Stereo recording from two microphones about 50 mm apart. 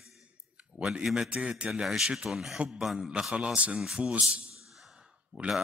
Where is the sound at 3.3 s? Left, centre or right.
Right.